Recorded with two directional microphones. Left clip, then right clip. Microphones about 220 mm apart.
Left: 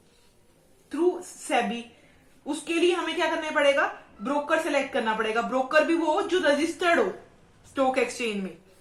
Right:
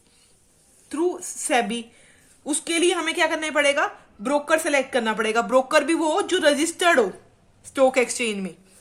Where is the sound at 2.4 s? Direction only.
45° right (ahead or behind).